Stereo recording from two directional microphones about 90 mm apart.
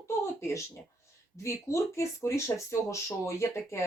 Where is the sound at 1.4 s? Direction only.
35° left (ahead or behind).